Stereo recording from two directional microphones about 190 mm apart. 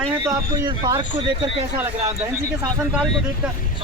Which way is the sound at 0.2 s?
20° right (ahead or behind).